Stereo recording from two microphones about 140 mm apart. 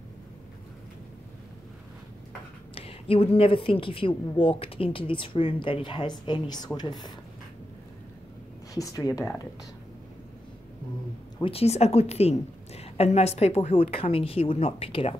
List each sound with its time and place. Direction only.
2.7 s a woman's voice: 40° left (ahead or behind)
8.7 s speech: 25° left (ahead or behind)
11.4 s a woman's voice: 45° left (ahead or behind)